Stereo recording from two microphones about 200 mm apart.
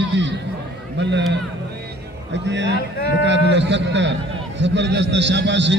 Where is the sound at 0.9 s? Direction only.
60° right (ahead or behind).